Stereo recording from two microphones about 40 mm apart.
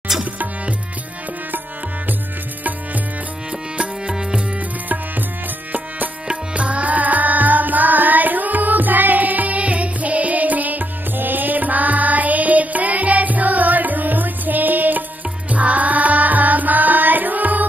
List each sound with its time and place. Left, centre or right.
0.2 s tabla: right
4.1 s music: centre
6.5 s music: right
15.5 s music: right